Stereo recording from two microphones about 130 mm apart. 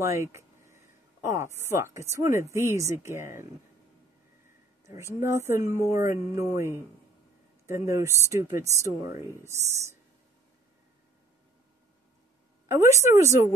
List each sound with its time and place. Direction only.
0.0 s speech: 20° right (ahead or behind)
4.8 s speech: 20° right (ahead or behind)
12.6 s speech: 20° right (ahead or behind)